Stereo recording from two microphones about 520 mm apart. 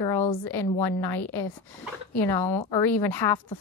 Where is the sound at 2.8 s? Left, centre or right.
Left.